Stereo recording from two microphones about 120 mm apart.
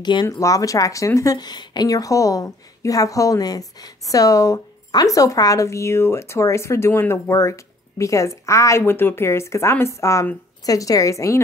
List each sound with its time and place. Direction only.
0.0 s speech: 40° left (ahead or behind)
0.4 s a woman's voice: 30° left (ahead or behind)